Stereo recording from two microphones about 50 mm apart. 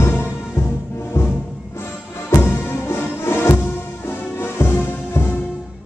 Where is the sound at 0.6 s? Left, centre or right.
Left.